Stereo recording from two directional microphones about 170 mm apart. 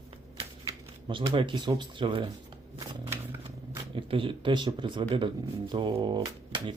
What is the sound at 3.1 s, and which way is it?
Shuffling cards, 15° right (ahead or behind).